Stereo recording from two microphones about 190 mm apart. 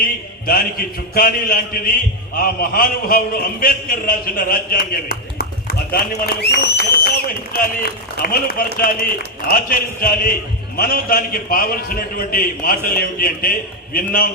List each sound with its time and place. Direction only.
0.0 s a man's voice: 50° left (ahead or behind)